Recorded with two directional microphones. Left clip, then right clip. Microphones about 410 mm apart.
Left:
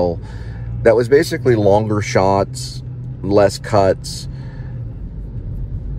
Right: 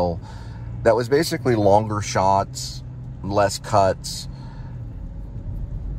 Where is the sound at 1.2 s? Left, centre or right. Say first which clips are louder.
Left 4 dB; right.